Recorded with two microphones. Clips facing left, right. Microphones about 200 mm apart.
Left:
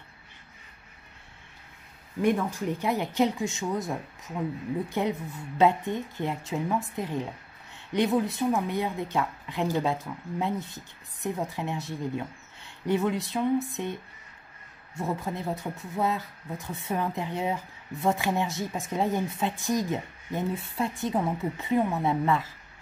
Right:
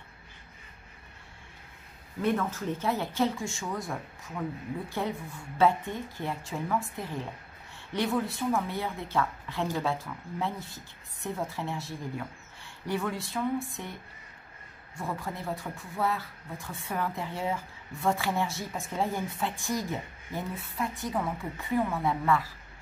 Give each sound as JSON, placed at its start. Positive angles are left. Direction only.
{"t": 2.2, "sound": "a woman's voice", "side_deg": 15}
{"t": 15.0, "sound": "speech", "side_deg": 20}